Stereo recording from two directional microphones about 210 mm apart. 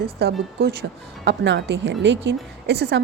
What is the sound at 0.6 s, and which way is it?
A woman's voice, 55° right (ahead or behind).